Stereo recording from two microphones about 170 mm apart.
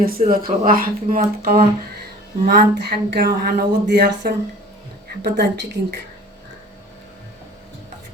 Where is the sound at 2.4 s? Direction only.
70° right (ahead or behind).